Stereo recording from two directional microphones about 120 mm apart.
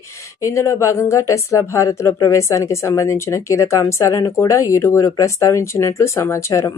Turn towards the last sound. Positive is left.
turn(degrees=25)  # may be behind; listen again after turning